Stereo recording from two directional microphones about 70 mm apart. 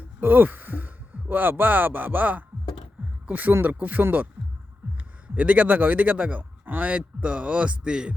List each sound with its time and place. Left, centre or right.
0.2 s speech: right
5.3 s speech: centre